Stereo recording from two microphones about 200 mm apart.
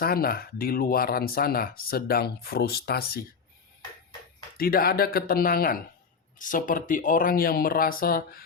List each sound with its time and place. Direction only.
0.0 s speech: 50° left (ahead or behind)
4.5 s speech: 50° left (ahead or behind)